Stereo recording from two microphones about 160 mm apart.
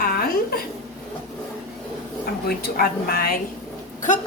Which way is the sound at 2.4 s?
70° left (ahead or behind).